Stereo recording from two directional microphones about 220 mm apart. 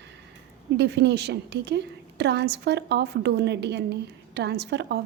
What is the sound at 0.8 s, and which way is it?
A woman's voice, 50° right (ahead or behind).